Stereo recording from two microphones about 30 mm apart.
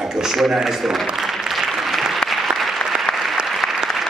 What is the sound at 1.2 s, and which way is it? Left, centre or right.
Applause, centre.